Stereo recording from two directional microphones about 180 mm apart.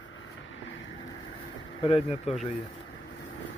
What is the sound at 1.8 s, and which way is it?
Speech, 30° left (ahead or behind).